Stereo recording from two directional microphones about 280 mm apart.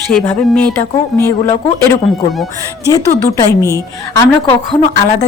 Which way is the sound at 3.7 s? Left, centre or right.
Centre.